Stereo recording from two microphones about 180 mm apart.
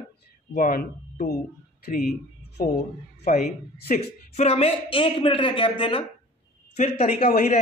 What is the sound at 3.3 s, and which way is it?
Speech, 55° left (ahead or behind).